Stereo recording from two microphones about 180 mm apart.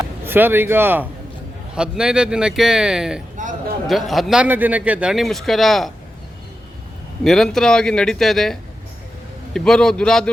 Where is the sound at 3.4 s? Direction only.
45° right (ahead or behind).